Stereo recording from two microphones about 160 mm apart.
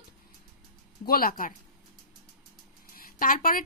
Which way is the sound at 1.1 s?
65° left (ahead or behind).